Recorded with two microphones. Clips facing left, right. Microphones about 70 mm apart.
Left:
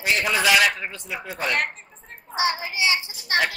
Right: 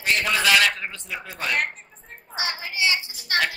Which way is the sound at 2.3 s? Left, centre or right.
Left.